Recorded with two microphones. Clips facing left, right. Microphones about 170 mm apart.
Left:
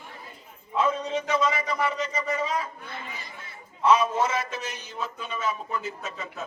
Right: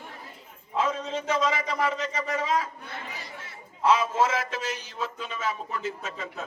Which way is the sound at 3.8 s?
90° right.